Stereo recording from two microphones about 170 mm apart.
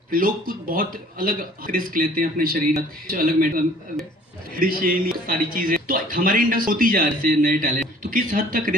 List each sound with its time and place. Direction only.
0.1 s a man's voice: 55° right (ahead or behind)
4.8 s a man's voice: 55° right (ahead or behind)